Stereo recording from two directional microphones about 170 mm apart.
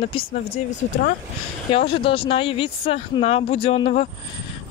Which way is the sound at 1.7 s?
35° left (ahead or behind).